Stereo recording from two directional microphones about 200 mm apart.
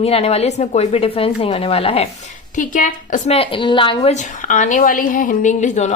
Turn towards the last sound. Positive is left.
turn(degrees=35)  # may be behind; listen again after turning